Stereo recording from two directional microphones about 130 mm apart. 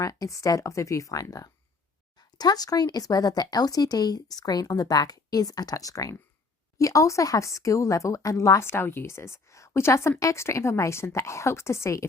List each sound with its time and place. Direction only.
0.0 s speech: 25° left (ahead or behind)